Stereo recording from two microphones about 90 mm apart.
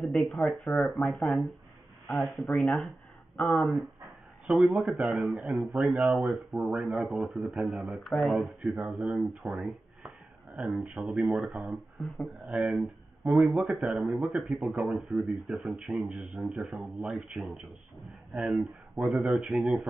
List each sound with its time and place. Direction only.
0.2 s speech: centre (ahead or behind)